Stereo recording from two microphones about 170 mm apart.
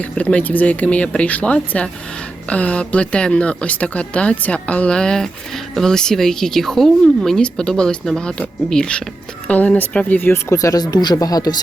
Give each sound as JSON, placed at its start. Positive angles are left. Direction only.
{"t": 0.0, "sound": "speech", "side_deg": 5}